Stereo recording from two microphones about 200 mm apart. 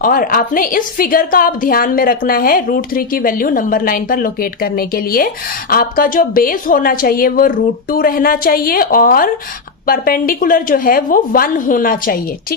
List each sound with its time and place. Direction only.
0.0 s a woman's voice: 45° left (ahead or behind)